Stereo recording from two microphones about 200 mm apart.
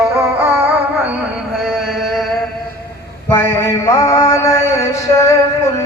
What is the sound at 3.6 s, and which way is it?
Mantra, 15° left (ahead or behind).